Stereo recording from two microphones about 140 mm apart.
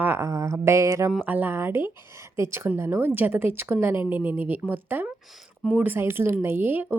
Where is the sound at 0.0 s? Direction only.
15° right (ahead or behind).